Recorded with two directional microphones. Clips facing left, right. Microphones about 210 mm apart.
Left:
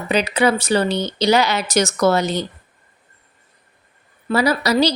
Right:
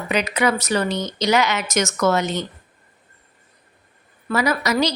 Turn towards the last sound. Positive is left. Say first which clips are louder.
# left 3 dB
turn(degrees=35)  # may be behind; listen again after turning